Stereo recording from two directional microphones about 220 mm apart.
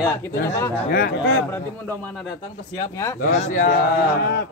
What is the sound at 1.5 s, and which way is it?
A man's voice, 10° left (ahead or behind).